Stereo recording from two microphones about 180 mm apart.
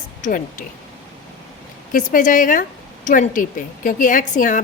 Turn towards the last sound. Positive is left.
turn(degrees=45)  # may be behind; listen again after turning